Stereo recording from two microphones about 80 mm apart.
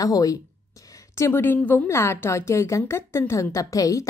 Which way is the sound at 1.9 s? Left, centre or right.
Left.